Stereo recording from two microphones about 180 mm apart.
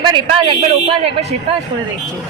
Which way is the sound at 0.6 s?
35° right (ahead or behind).